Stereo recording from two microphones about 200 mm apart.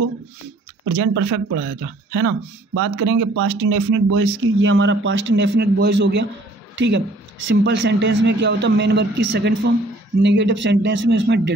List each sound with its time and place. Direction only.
0.9 s a man's voice: 65° right (ahead or behind)